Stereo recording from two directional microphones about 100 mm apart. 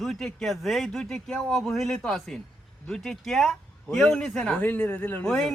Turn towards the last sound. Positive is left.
turn(degrees=5)  # may be behind; listen again after turning